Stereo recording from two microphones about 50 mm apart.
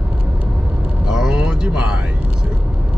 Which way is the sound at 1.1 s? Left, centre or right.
Centre.